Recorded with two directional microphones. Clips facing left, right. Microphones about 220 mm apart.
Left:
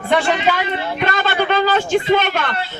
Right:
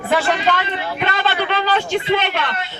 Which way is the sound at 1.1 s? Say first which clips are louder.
Left 3 dB; 45° left (ahead or behind).